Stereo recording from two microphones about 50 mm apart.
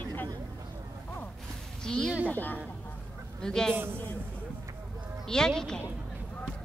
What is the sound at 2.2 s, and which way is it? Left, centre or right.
Speech, left.